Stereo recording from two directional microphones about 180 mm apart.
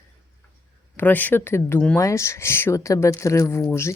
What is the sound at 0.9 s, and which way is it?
Speech, 10° left (ahead or behind).